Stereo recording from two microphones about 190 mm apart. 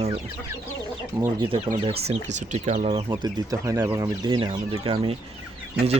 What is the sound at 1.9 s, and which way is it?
Speech, 35° right (ahead or behind).